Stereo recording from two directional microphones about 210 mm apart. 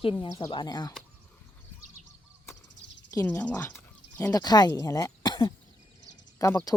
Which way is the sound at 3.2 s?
10° left (ahead or behind).